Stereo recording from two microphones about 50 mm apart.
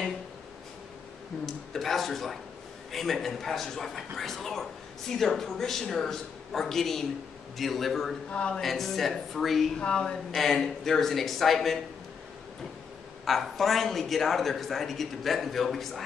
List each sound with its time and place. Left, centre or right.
1.4 s a man's voice: centre
8.3 s a woman's voice: left
8.5 s a man's voice: centre
9.8 s a woman's voice: centre
10.3 s a man's voice: centre
13.2 s a man's voice: centre